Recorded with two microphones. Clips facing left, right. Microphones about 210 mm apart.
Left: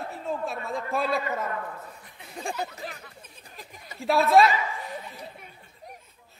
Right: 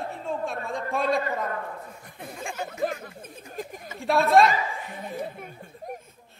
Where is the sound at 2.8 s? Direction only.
50° right (ahead or behind).